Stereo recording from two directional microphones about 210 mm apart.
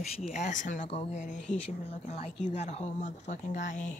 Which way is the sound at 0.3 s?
35° left (ahead or behind).